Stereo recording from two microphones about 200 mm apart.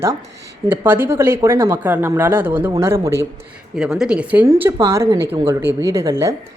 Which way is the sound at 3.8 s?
5° right (ahead or behind).